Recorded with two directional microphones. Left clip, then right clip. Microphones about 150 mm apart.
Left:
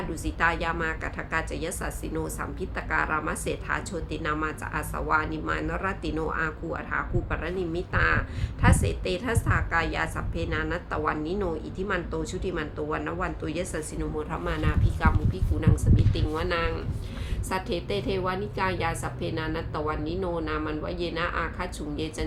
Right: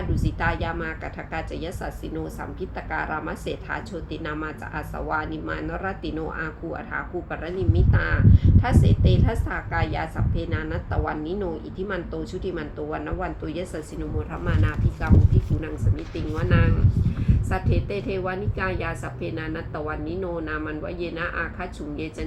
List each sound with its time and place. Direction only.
0.3 s a woman's voice: 20° left (ahead or behind)
16.1 s a woman's voice: 25° left (ahead or behind)